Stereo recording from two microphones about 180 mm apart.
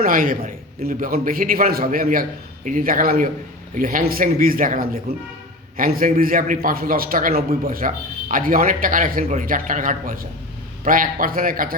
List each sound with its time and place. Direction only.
0.0 s a man's voice: 50° right (ahead or behind)